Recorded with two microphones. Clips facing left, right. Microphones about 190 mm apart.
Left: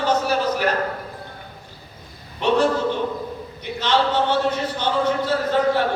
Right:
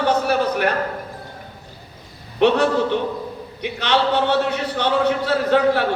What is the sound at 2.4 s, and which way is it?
Speech, 65° right (ahead or behind).